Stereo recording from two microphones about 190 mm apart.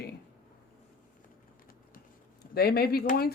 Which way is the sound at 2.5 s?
55° left (ahead or behind).